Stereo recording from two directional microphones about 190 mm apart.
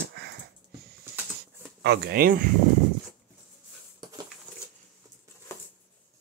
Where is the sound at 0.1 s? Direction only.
60° right (ahead or behind).